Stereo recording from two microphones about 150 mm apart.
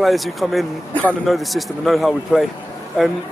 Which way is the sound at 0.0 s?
Centre (ahead or behind).